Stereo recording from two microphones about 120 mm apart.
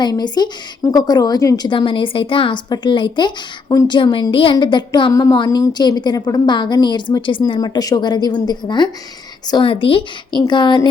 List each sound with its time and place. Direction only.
0.0 s a woman's voice: 35° left (ahead or behind)